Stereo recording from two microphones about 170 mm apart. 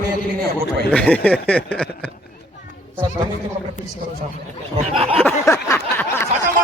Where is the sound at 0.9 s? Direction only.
5° left (ahead or behind).